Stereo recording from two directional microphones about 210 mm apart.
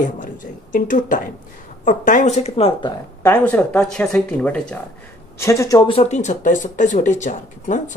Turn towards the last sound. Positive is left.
turn(degrees=35)  # may be behind; listen again after turning